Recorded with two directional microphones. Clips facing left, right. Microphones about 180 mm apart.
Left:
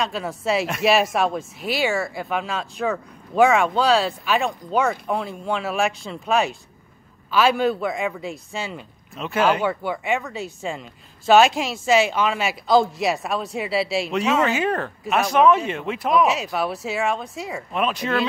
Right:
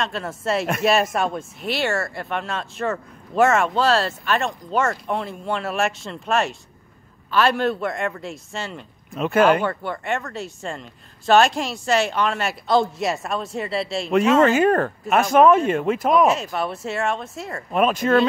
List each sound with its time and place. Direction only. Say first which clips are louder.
0.0 s speech: left 1 dB; centre (ahead or behind)
9.1 s speech: right 4 dB; 50° right (ahead or behind)
9.5 s speech: right 2 dB; 5° left (ahead or behind)
14.4 s speech: right 5 dB; 50° right (ahead or behind)
16.3 s speech: right 1 dB; centre (ahead or behind)
17.7 s speech: right 6 dB; 45° right (ahead or behind)